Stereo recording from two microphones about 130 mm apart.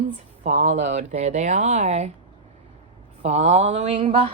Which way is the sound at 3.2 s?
55° right (ahead or behind).